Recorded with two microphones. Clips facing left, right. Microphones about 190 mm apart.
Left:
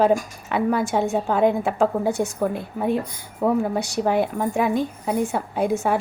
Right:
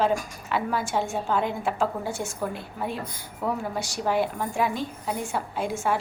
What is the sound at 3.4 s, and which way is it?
A woman's voice, 60° left (ahead or behind).